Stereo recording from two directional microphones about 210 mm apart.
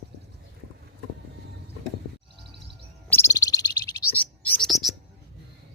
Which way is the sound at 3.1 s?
15° left (ahead or behind).